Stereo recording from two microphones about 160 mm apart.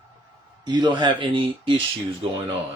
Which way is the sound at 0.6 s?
30° right (ahead or behind).